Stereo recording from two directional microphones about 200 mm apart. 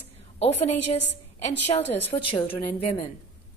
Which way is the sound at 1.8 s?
10° left (ahead or behind).